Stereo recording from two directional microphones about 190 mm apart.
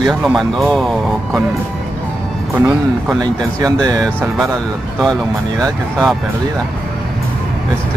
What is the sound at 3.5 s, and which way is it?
Speech, 20° right (ahead or behind).